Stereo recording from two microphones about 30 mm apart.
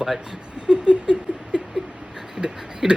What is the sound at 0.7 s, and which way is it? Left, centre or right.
Rodents, right.